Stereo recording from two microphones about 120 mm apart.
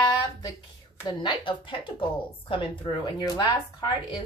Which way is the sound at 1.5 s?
45° left (ahead or behind).